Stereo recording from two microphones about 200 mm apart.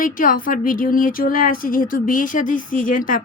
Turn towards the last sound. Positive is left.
turn(degrees=40)  # may be behind; listen again after turning